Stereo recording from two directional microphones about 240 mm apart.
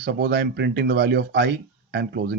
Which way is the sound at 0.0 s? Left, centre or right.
Right.